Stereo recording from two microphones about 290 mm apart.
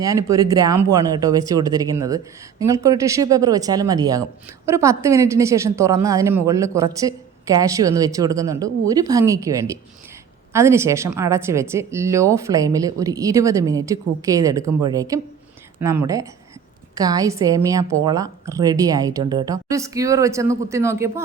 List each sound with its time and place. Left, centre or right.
0.0 s speech: centre